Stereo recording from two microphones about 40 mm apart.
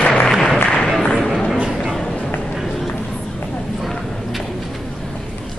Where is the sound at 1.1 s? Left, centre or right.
Centre.